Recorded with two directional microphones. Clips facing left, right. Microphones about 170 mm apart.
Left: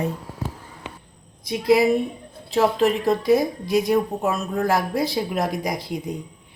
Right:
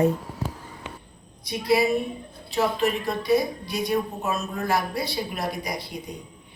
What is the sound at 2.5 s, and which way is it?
A woman's voice, 90° left.